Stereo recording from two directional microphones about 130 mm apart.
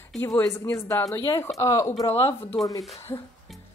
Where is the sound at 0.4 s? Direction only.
20° left (ahead or behind).